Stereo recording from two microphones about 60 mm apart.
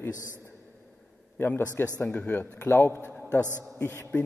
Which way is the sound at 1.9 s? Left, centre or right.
Left.